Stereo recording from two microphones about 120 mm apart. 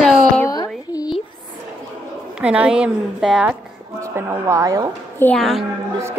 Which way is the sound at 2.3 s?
10° right (ahead or behind).